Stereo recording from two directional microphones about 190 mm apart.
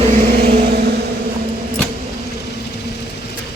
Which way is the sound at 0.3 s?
55° right (ahead or behind).